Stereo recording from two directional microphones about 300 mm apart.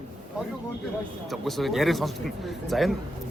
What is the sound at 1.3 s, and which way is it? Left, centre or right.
Speech, centre.